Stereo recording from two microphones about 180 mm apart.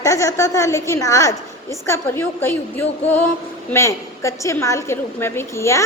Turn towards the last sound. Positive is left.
turn(degrees=15)  # may be behind; listen again after turning